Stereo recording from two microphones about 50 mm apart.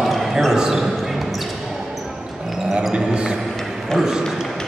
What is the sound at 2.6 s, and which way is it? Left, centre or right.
Basketball bounce, centre.